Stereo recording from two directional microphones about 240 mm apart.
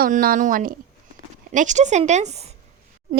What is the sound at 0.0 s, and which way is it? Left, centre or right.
A woman's voice, right.